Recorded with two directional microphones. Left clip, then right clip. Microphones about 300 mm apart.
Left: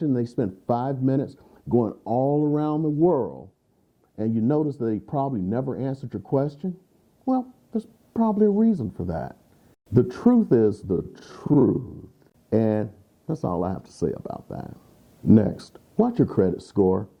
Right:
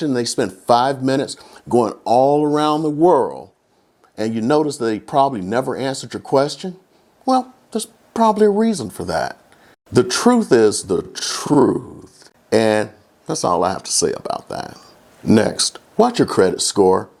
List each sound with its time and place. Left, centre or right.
0.0 s speech: centre
2.8 s a woman's voice: centre
16.7 s speech: centre